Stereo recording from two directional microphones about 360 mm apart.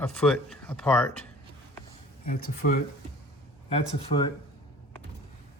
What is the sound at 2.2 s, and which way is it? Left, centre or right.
Speech, left.